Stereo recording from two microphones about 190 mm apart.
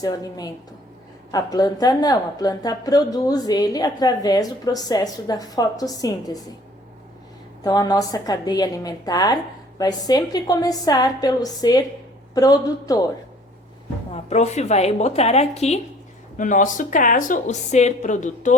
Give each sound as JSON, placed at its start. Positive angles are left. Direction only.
{"t": 0.0, "sound": "a woman's voice", "side_deg": 20}
{"t": 7.6, "sound": "a woman's voice", "side_deg": 20}
{"t": 14.1, "sound": "speech", "side_deg": 35}